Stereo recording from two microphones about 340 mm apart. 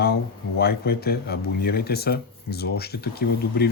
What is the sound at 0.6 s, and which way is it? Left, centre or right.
Speech, left.